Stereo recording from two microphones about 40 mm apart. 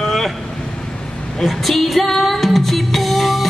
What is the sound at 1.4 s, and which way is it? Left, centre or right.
Music, centre.